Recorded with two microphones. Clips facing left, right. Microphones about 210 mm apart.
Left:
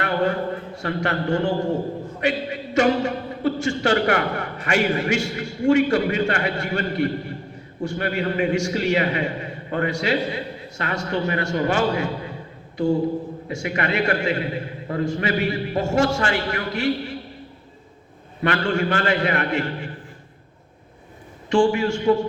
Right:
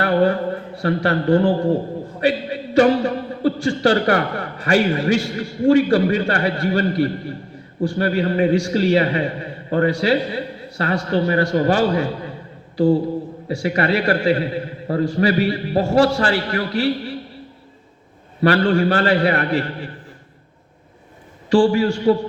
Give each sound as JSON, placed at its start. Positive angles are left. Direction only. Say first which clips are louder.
{"t": 0.0, "sound": "a sound", "louder": "right 5 dB", "side_deg": -35}
{"t": 0.8, "sound": "a man's voice", "louder": "right 6 dB", "side_deg": -35}
{"t": 18.4, "sound": "a man's voice", "louder": "right 6 dB", "side_deg": -35}
{"t": 21.5, "sound": "a man's voice", "louder": "right 3 dB", "side_deg": -35}